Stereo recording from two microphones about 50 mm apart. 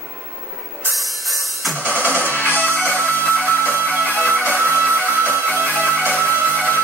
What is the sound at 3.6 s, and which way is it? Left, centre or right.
Music, right.